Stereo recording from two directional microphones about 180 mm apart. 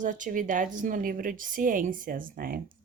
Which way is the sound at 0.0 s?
45° right (ahead or behind).